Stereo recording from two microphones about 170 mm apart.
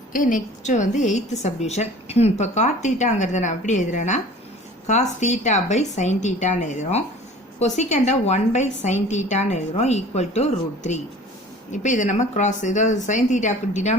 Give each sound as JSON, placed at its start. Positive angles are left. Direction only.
{"t": 0.1, "sound": "a woman's voice", "side_deg": 50}